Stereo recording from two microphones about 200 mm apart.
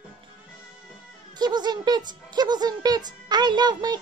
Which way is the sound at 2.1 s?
20° right (ahead or behind).